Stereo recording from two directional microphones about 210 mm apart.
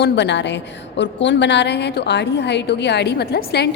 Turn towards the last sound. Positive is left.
turn(degrees=50)  # may be behind; listen again after turning